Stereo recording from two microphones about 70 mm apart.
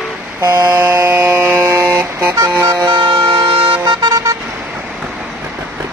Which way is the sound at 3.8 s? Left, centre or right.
Right.